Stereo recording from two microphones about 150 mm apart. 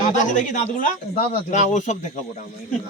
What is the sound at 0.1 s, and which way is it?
Speech, 55° left (ahead or behind).